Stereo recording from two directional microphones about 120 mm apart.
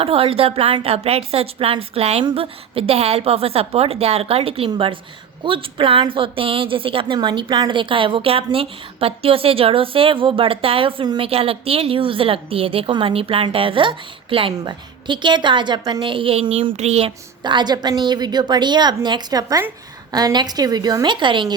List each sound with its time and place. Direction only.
0.0 s a woman's voice: 50° right (ahead or behind)
11.3 s a woman's voice: 55° right (ahead or behind)
17.4 s a woman's voice: 40° right (ahead or behind)